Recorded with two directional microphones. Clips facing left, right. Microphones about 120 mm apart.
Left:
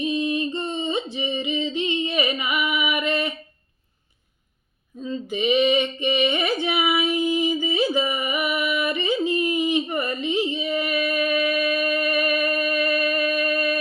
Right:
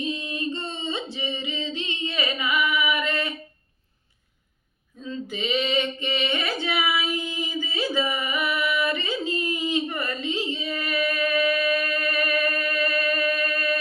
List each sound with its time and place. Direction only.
0.0 s singing: 15° left (ahead or behind)
4.9 s female singing: 20° left (ahead or behind)